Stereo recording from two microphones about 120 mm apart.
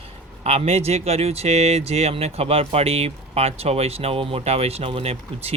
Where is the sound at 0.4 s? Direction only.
60° right (ahead or behind).